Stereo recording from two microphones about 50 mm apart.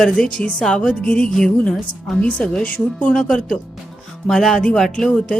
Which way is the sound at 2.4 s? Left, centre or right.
Left.